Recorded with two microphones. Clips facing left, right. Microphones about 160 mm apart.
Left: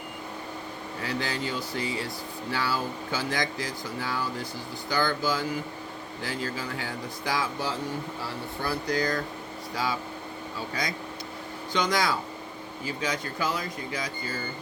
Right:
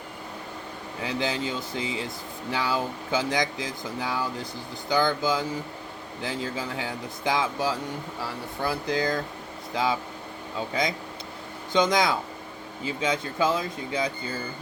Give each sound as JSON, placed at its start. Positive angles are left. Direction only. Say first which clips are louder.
{"t": 1.0, "sound": "speech", "louder": "right 3 dB", "side_deg": -20}
{"t": 11.7, "sound": "speech", "louder": "right 4 dB", "side_deg": -20}